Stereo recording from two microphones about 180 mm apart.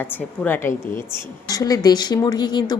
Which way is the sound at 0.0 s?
10° left (ahead or behind).